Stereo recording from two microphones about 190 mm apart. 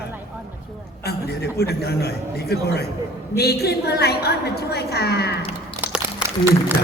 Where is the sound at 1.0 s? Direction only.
55° left (ahead or behind).